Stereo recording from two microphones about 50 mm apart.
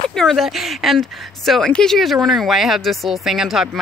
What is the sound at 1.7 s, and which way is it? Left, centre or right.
Speech, centre.